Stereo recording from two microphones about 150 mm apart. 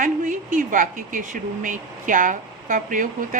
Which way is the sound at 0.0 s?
60° right (ahead or behind).